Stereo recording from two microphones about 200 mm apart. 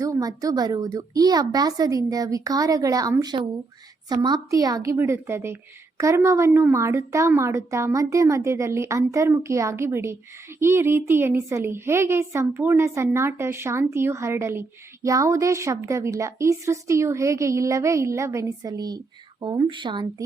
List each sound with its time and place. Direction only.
0.0 s a woman's voice: 15° right (ahead or behind)